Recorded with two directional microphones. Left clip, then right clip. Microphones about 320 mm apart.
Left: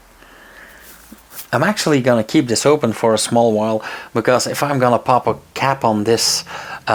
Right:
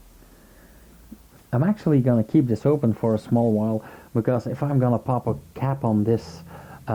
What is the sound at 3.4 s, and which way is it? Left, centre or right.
Speech, left.